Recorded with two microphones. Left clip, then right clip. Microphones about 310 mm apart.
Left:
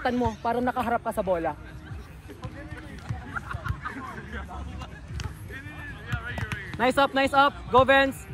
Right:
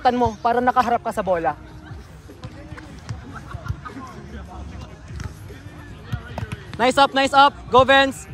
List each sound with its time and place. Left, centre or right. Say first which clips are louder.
0.0 s a man's voice: right 8 dB; right
6.8 s speech: right 6 dB; centre